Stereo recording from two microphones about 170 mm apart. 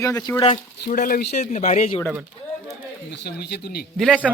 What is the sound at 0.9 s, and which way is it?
Speech, 55° left (ahead or behind).